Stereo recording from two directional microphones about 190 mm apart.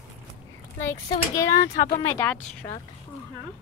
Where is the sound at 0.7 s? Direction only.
15° left (ahead or behind).